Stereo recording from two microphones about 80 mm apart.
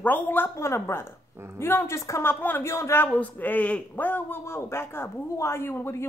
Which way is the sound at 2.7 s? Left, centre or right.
Left.